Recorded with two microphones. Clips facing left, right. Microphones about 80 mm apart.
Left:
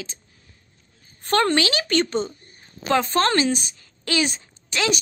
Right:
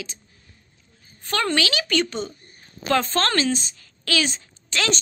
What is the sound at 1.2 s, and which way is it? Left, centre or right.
A woman's voice, left.